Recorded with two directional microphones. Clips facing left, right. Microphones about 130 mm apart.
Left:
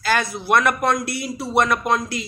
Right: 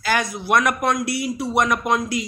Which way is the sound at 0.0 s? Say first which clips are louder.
Left 1 dB; 10° right (ahead or behind).